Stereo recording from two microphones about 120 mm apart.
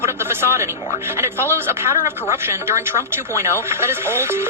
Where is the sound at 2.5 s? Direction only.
20° right (ahead or behind).